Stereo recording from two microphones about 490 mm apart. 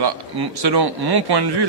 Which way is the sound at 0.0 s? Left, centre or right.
Right.